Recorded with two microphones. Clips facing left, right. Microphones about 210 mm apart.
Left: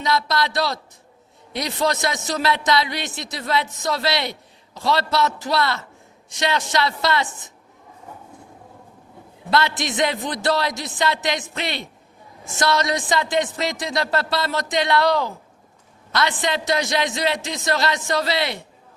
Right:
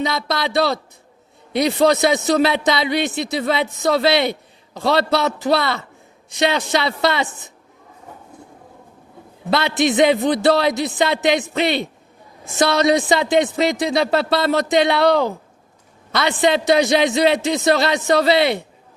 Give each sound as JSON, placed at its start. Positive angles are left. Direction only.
{"t": 0.1, "sound": "a man's voice", "side_deg": -60}
{"t": 9.5, "sound": "a man's voice", "side_deg": -60}